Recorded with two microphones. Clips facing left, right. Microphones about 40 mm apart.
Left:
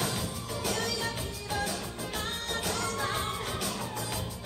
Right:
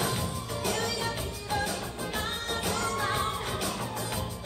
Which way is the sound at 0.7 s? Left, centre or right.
Centre.